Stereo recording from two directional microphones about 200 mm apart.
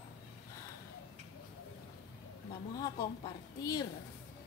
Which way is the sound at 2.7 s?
20° left (ahead or behind).